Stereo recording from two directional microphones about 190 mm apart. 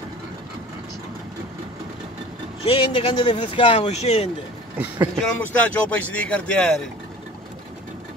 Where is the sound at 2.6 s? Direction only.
30° left (ahead or behind).